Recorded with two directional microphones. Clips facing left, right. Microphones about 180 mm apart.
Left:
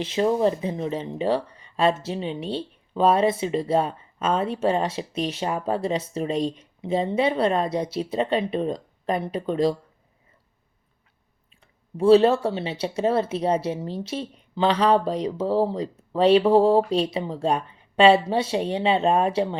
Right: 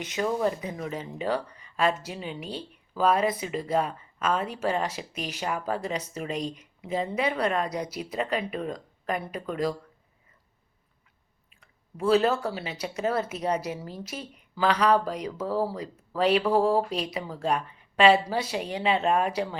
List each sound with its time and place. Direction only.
0.0 s speech: 30° left (ahead or behind)
11.6 s speech: 30° left (ahead or behind)